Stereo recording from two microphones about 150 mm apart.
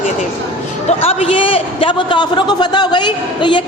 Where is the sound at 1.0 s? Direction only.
40° left (ahead or behind).